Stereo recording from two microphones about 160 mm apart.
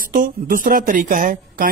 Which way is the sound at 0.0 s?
60° right (ahead or behind).